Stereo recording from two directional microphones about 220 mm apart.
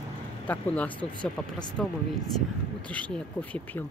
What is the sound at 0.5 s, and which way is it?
Speech, 5° left (ahead or behind).